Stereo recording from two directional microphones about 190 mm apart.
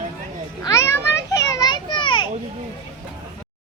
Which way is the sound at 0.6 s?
15° left (ahead or behind).